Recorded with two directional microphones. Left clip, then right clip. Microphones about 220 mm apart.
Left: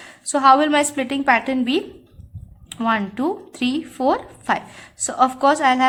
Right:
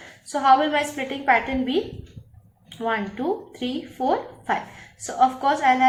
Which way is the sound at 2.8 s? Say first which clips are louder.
Left 4 dB; 45° left (ahead or behind).